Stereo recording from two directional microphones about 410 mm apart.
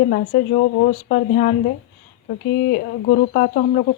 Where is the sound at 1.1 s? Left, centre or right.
Centre.